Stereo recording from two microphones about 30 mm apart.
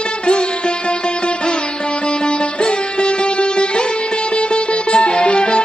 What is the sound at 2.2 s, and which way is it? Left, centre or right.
Music, left.